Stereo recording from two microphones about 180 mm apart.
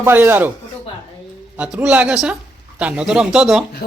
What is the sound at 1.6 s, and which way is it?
Speech, 5° right (ahead or behind).